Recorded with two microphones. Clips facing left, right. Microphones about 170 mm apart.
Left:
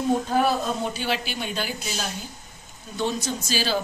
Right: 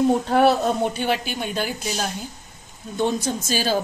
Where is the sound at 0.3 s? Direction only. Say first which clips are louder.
Right 5 dB; 70° right (ahead or behind); by 1.7 s 50° right (ahead or behind).